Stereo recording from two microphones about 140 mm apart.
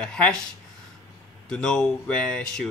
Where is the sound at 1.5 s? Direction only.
5° left (ahead or behind).